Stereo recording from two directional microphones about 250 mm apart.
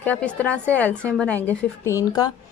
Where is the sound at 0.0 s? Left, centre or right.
Centre.